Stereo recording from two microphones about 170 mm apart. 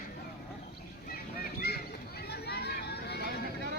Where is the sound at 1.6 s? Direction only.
65° left (ahead or behind).